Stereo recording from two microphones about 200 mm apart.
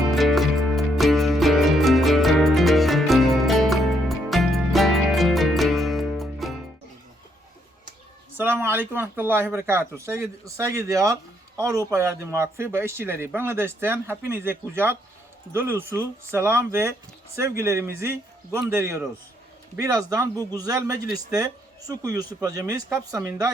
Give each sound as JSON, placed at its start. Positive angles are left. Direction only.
{"t": 0.1, "sound": "music", "side_deg": 0}
{"t": 8.4, "sound": "speech", "side_deg": -10}